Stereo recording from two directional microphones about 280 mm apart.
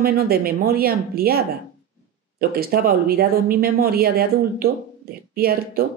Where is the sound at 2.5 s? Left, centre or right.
Right.